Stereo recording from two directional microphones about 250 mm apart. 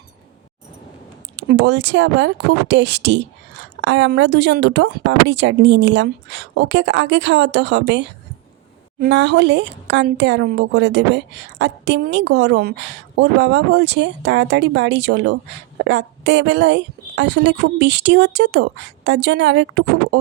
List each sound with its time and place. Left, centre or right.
1.4 s speech: right